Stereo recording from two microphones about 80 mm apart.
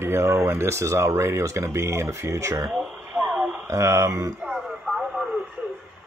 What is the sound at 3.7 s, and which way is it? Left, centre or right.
Speech, right.